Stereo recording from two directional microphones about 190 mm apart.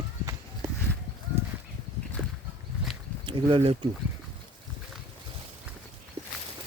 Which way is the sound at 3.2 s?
25° right (ahead or behind).